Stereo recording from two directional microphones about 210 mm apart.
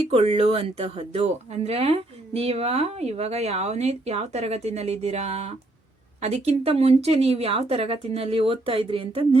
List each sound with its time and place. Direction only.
0.1 s speech: 30° right (ahead or behind)